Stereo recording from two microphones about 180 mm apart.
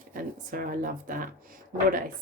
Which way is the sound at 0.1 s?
50° right (ahead or behind).